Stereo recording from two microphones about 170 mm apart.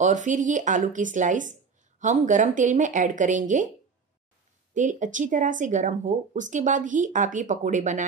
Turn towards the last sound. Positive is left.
turn(degrees=-45)  # may be behind; listen again after turning